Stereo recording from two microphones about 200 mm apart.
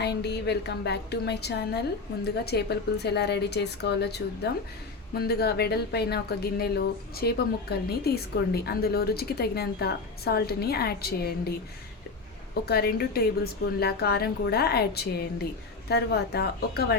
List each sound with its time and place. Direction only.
0.0 s a woman's voice: 55° left (ahead or behind)
5.2 s speech: 50° left (ahead or behind)
12.6 s speech: 50° left (ahead or behind)